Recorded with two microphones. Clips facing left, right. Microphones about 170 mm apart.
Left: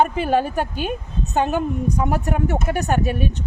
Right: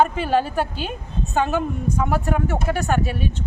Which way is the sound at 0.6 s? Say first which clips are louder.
Left 2 dB; 50° left (ahead or behind).